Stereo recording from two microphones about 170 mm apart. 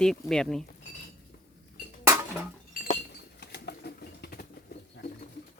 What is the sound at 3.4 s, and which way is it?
Bird, 75° left (ahead or behind).